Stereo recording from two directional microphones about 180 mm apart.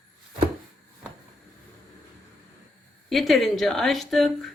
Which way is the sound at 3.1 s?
Centre (ahead or behind).